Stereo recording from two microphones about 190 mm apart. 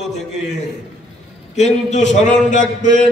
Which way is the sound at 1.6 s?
35° left (ahead or behind).